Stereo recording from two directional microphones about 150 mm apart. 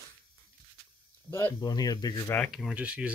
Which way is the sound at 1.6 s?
25° left (ahead or behind).